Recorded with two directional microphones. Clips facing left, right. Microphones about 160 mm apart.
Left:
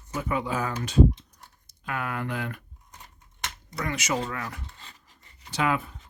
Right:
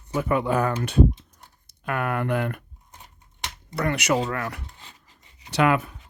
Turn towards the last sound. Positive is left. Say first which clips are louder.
# right 6 dB
turn(degrees=-70)  # may be behind; listen again after turning